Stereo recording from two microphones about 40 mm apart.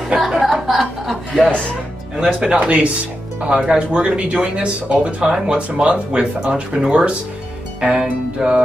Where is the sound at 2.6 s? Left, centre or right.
Right.